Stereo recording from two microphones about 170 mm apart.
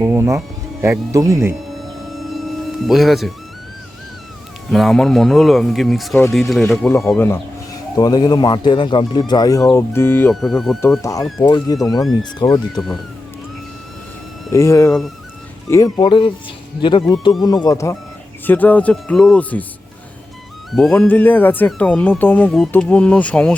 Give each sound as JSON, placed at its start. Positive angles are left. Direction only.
{"t": 0.0, "sound": "speech", "side_deg": -15}
{"t": 2.3, "sound": "music", "side_deg": 0}
{"t": 4.7, "sound": "speech", "side_deg": 0}
{"t": 7.1, "sound": "speech", "side_deg": 15}
{"t": 10.4, "sound": "speech", "side_deg": 0}
{"t": 11.4, "sound": "speech", "side_deg": 25}
{"t": 14.5, "sound": "speech", "side_deg": 15}
{"t": 20.7, "sound": "speech", "side_deg": 0}